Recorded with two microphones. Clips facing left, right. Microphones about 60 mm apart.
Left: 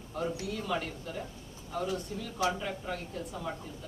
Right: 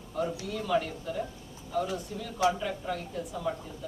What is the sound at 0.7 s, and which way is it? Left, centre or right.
Speech, centre.